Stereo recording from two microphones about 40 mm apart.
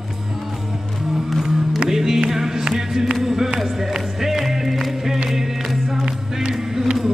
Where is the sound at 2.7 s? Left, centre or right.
Centre.